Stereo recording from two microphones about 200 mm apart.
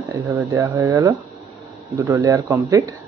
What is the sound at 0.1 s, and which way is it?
Speech, 15° right (ahead or behind).